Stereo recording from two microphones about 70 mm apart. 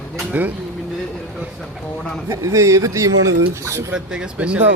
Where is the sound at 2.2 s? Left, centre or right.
Right.